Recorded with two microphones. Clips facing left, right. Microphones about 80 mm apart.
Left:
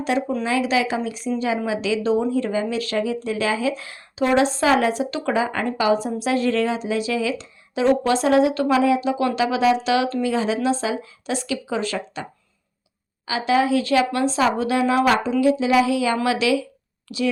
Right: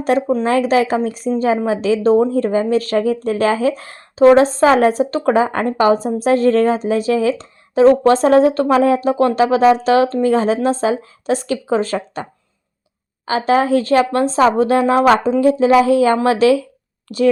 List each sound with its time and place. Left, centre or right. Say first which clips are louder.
0.0 s speech: right 7 dB; right
13.2 s speech: right 5 dB; right